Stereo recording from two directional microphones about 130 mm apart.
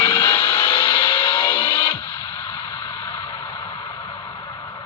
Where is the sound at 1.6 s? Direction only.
20° left (ahead or behind).